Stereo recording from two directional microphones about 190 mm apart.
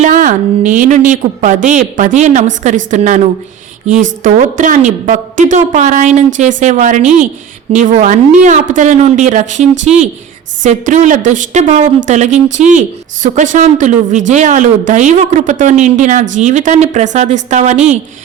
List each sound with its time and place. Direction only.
0.0 s a woman's voice: 40° right (ahead or behind)
4.2 s a woman's voice: 40° right (ahead or behind)